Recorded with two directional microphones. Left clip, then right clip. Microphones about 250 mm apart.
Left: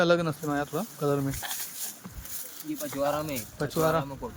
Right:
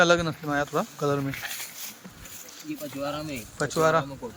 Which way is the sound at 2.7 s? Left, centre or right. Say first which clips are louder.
Left 4 dB; centre.